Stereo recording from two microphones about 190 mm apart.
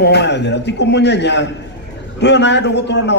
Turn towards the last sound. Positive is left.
turn(degrees=65)  # may be behind; listen again after turning